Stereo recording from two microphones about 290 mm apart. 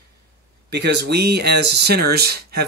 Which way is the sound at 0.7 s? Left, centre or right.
Right.